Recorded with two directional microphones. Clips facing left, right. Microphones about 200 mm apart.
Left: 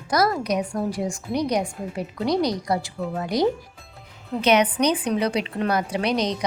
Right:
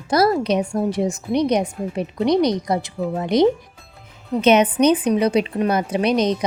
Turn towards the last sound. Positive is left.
turn(degrees=-20)  # may be behind; listen again after turning